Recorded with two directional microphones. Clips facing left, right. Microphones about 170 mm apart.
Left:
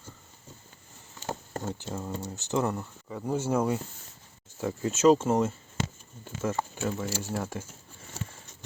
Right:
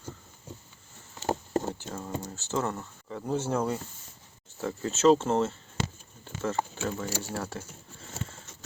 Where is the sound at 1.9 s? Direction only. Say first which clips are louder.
Left 1 dB; 5° left (ahead or behind).